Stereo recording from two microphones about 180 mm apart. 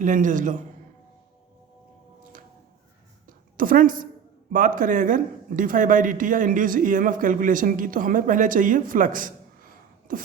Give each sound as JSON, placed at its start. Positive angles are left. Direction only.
{"t": 0.0, "sound": "speech", "side_deg": -45}
{"t": 3.2, "sound": "a sound", "side_deg": -50}
{"t": 4.5, "sound": "speech", "side_deg": -50}